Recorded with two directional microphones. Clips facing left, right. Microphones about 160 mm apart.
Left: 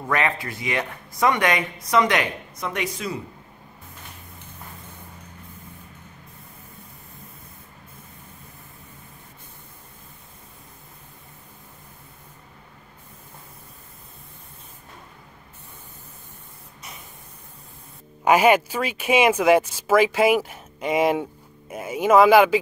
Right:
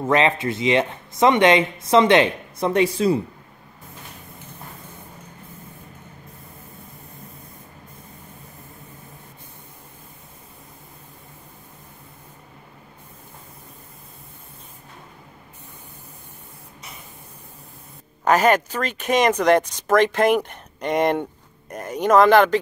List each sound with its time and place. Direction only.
0.0 s speech: 20° right (ahead or behind)
18.2 s speech: 10° left (ahead or behind)